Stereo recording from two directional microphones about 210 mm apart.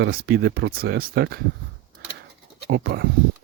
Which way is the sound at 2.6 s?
50° right (ahead or behind).